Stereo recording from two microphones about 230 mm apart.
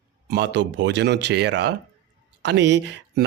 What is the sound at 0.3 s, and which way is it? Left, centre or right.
Speech, right.